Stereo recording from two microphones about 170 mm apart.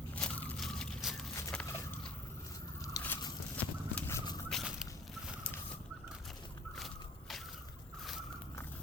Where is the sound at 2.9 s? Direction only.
20° left (ahead or behind).